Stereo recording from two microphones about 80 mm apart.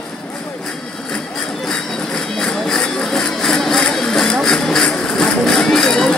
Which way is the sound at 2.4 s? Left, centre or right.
Centre.